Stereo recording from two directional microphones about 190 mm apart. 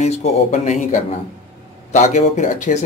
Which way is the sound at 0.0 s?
35° left (ahead or behind).